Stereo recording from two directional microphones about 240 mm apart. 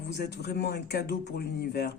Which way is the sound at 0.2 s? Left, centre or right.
Left.